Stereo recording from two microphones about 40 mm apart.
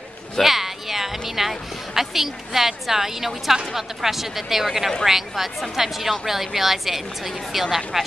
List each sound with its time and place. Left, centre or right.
0.4 s a woman's voice: centre